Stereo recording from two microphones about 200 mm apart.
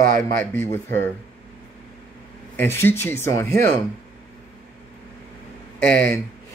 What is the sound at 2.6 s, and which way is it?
Speech, 10° left (ahead or behind).